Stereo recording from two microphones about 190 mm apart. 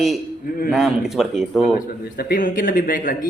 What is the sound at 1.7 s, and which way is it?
Speech, 50° left (ahead or behind).